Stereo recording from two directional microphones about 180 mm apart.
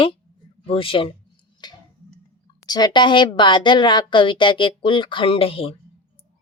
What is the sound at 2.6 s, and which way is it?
Speech, 25° left (ahead or behind).